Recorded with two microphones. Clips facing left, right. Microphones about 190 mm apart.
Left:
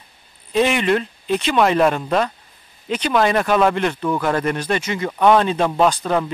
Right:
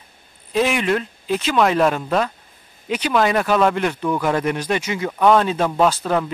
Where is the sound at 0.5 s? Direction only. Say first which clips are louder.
Left 2 dB; 5° right (ahead or behind).